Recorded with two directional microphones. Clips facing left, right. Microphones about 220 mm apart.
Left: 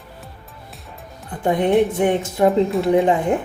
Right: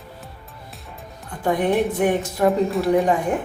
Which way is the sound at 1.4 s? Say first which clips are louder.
Left 3 dB; 20° left (ahead or behind).